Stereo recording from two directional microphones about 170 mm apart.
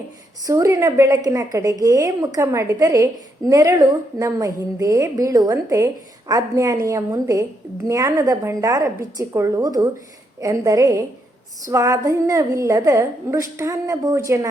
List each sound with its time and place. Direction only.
0.4 s a woman's voice: 20° right (ahead or behind)